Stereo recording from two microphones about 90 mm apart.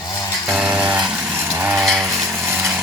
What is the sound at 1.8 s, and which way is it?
Vehicle, centre (ahead or behind).